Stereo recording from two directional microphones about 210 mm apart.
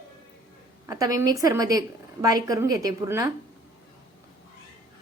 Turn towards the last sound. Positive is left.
turn(degrees=-15)  # may be behind; listen again after turning